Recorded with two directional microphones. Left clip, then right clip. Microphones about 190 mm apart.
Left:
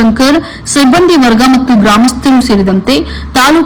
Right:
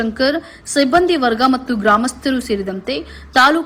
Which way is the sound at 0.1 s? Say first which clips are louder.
Left 9 dB; centre (ahead or behind).